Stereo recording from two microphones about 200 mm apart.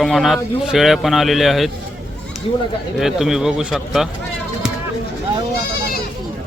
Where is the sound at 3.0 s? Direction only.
Centre (ahead or behind).